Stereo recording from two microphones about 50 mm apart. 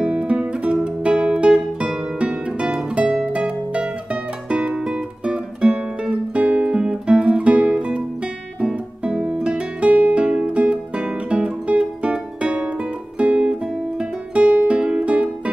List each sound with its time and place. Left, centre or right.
0.0 s music: right
13.2 s guitar: right